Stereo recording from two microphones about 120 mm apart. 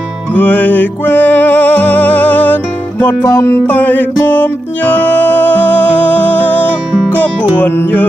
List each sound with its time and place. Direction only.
0.3 s music: 15° left (ahead or behind)
3.3 s music: 25° left (ahead or behind)
3.6 s music: 15° left (ahead or behind)